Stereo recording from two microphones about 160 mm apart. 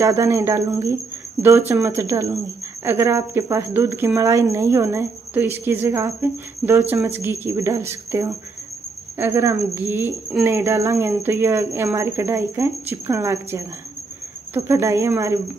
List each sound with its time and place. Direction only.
0.0 s cricket: 20° right (ahead or behind)
1.4 s speech: 15° right (ahead or behind)
14.5 s cricket: 20° right (ahead or behind)